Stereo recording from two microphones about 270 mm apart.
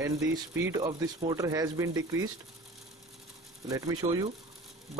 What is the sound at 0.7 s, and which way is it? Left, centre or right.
Speech, centre.